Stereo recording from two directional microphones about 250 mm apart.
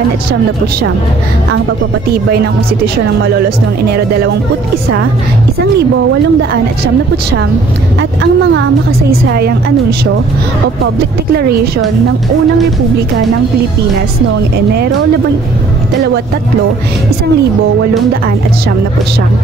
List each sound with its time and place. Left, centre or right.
8.0 s a woman's voice: right